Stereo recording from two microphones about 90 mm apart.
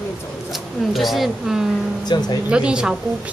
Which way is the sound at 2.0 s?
50° left (ahead or behind).